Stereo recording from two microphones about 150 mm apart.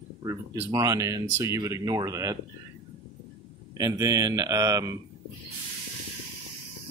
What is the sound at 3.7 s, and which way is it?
Speech, 25° right (ahead or behind).